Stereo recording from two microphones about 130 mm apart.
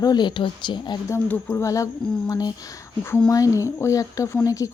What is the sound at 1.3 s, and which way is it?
Speech, 20° left (ahead or behind).